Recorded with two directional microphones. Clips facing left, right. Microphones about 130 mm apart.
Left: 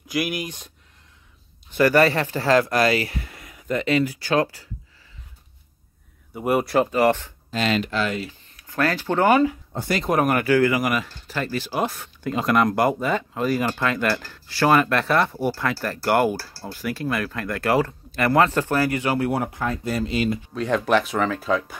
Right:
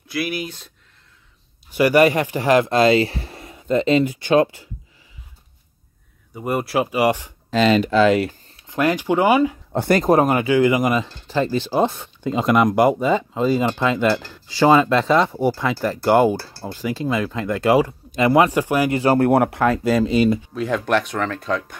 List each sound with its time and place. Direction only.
0.1 s speech: 15° left (ahead or behind)
1.7 s speech: 15° right (ahead or behind)
6.3 s speech: 5° left (ahead or behind); by 7.3 s 10° right (ahead or behind)
8.6 s speech: 15° right (ahead or behind)
9.8 s speech: 45° right (ahead or behind)
10.1 s speech: 20° right (ahead or behind)
18.9 s speech: 30° right (ahead or behind)
19.1 s speech: 55° right (ahead or behind); by 20.0 s 90° right
20.5 s speech: centre (ahead or behind)